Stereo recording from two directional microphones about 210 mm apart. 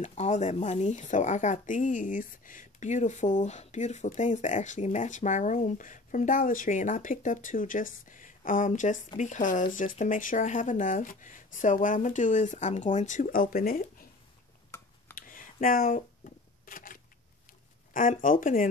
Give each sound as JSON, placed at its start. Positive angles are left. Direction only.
{"t": 0.0, "sound": "speech", "side_deg": 30}
{"t": 15.1, "sound": "a sound", "side_deg": 40}
{"t": 17.9, "sound": "speech", "side_deg": 40}